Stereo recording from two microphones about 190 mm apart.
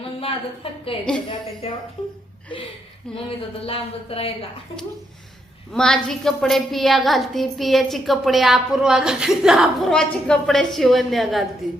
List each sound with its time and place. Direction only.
0.0 s a sound: 30° left (ahead or behind)
1.6 s a woman's voice: 30° left (ahead or behind)
3.2 s speech: 30° left (ahead or behind)
5.7 s a woman's voice: 5° left (ahead or behind)